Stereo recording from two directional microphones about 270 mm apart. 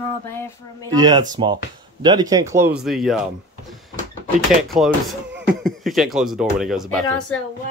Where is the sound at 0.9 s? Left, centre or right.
Centre.